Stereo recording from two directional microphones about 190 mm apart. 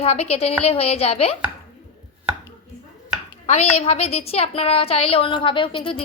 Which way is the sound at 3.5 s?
35° left (ahead or behind).